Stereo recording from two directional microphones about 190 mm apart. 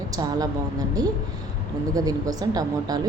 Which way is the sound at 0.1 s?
20° right (ahead or behind).